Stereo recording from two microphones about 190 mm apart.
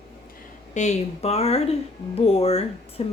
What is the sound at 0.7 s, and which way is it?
Speech, 35° left (ahead or behind).